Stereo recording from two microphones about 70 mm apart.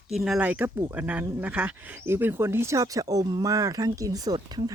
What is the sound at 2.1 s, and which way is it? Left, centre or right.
Speech, right.